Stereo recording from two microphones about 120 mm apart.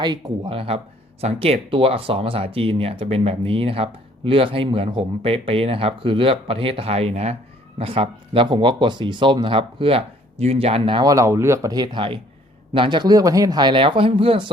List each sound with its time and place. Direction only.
0.0 s speech: 40° right (ahead or behind); by 7.3 s 65° right (ahead or behind)
7.8 s speech: 50° right (ahead or behind)
11.0 s speech: 25° right (ahead or behind); by 14.5 s 45° right (ahead or behind)